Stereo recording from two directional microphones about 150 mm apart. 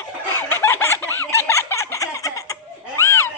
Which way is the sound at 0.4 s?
15° left (ahead or behind).